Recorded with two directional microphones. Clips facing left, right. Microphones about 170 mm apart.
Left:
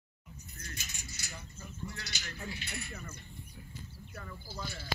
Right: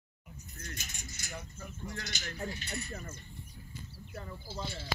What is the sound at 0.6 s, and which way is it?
Speech, 50° right (ahead or behind).